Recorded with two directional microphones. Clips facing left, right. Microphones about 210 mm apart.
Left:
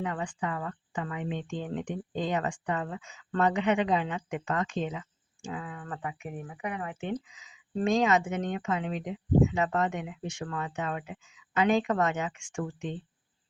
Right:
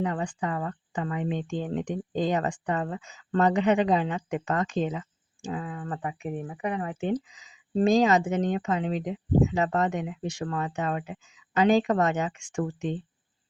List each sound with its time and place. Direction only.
0.0 s speech: 35° right (ahead or behind)